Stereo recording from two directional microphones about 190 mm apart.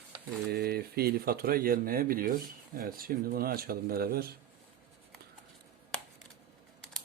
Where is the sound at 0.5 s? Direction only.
55° right (ahead or behind).